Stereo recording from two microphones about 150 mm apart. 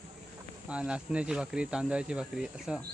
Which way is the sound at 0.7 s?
10° right (ahead or behind).